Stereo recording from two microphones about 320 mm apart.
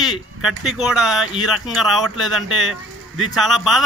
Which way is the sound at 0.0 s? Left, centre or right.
Centre.